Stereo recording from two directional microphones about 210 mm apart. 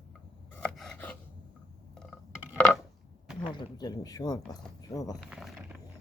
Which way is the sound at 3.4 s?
20° left (ahead or behind).